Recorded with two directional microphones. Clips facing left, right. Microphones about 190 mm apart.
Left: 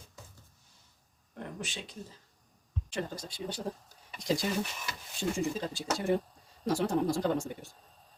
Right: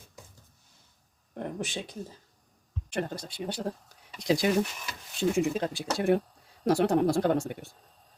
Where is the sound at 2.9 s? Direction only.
65° right (ahead or behind).